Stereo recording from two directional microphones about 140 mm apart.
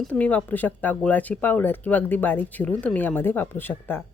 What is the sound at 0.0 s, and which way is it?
Speech, 10° left (ahead or behind).